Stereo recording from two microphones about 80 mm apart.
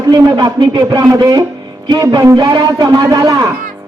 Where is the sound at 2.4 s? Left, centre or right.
Right.